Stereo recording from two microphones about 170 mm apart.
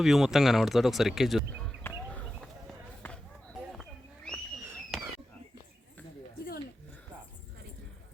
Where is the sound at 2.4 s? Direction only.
5° left (ahead or behind).